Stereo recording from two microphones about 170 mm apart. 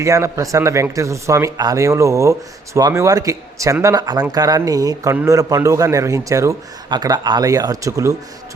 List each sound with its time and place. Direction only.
0.0 s a man's voice: 20° right (ahead or behind)